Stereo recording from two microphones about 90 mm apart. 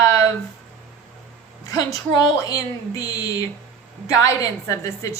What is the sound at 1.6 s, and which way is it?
A woman's voice, 45° left (ahead or behind).